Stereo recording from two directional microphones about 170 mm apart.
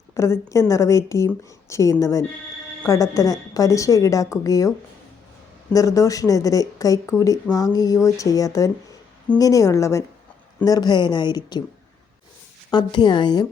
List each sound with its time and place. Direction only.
0.1 s a woman's voice: 15° left (ahead or behind)
5.7 s a woman's voice: 20° left (ahead or behind)
12.7 s a woman's voice: 25° left (ahead or behind)